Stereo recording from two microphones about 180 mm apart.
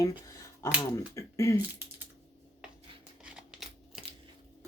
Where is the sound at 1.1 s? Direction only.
15° left (ahead or behind).